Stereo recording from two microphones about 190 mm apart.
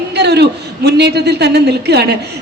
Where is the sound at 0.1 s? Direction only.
60° right (ahead or behind).